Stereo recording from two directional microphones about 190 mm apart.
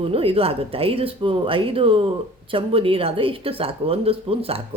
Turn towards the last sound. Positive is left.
turn(degrees=-30)  # may be behind; listen again after turning